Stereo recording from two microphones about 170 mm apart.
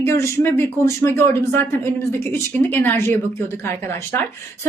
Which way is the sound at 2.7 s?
10° left (ahead or behind).